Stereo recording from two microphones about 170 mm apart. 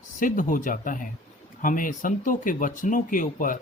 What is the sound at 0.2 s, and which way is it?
Speech, 50° left (ahead or behind).